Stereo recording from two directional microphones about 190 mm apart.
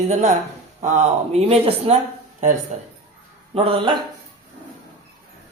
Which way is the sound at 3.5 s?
30° right (ahead or behind).